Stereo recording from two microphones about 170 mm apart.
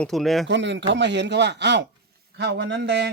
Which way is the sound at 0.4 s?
90° right.